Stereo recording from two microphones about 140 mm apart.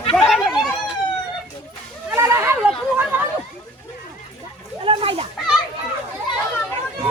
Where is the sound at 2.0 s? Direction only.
20° right (ahead or behind).